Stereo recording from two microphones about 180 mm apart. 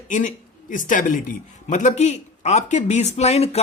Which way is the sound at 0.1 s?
45° left (ahead or behind).